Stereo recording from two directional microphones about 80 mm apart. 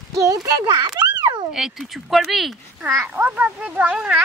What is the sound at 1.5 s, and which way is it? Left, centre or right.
Speech, centre.